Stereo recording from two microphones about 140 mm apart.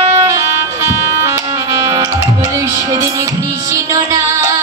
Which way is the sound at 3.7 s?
25° right (ahead or behind).